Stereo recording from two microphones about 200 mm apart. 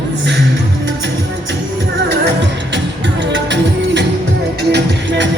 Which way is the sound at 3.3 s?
60° right (ahead or behind).